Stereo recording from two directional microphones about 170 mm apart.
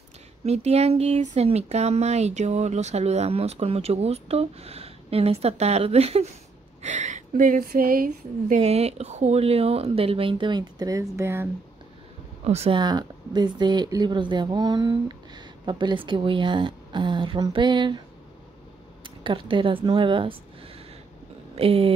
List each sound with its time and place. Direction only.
0.5 s speech: 40° right (ahead or behind); by 11.4 s 15° right (ahead or behind)
12.4 s speech: 35° right (ahead or behind)
19.0 s speech: 30° right (ahead or behind)